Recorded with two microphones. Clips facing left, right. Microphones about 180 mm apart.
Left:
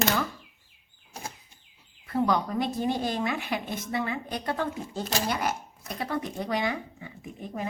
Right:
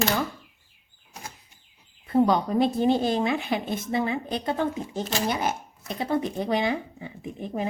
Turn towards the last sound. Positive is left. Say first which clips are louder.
# right 5 dB
turn(degrees=-25)  # may be behind; listen again after turning